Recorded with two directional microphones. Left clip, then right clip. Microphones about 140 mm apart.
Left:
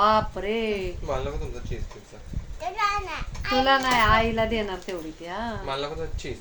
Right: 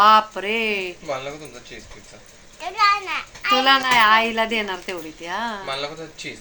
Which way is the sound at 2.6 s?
30° left (ahead or behind).